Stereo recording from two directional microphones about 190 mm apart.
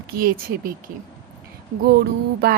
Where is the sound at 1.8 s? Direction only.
55° right (ahead or behind).